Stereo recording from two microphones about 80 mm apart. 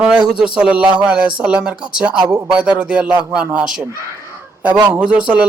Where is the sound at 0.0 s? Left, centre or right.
Centre.